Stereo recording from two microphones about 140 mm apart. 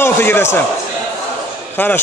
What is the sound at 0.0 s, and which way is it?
Speech, 15° left (ahead or behind).